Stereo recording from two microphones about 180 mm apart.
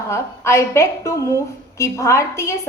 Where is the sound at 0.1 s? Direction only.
15° left (ahead or behind).